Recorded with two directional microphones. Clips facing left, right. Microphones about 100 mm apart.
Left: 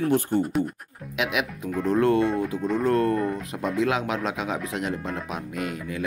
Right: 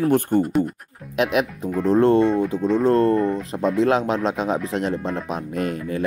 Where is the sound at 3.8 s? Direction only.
35° right (ahead or behind).